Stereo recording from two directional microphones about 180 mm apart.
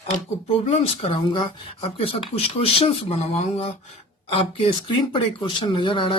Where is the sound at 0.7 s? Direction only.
30° left (ahead or behind).